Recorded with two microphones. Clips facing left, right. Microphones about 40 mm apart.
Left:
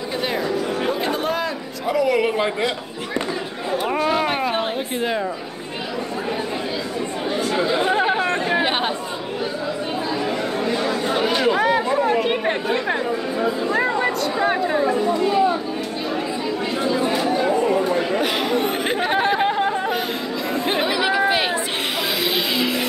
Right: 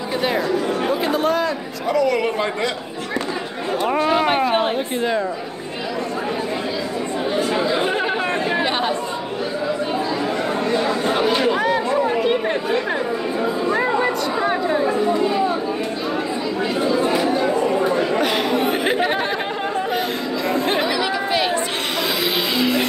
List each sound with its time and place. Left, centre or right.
0.2 s speech: centre
3.7 s speech: centre
7.7 s chatter: centre
8.5 s chatter: centre
11.4 s chatter: centre
12.3 s speech: centre
13.7 s a sound: centre
14.4 s a woman's voice: centre
18.2 s chatter: centre